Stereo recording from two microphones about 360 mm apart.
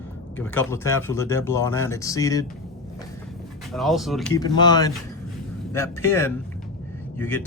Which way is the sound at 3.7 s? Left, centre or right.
Centre.